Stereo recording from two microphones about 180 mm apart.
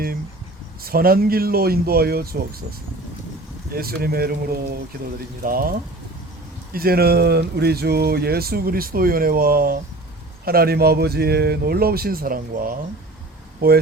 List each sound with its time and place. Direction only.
0.9 s speech: 55° right (ahead or behind)
3.7 s speech: 55° right (ahead or behind)
6.7 s speech: 55° right (ahead or behind)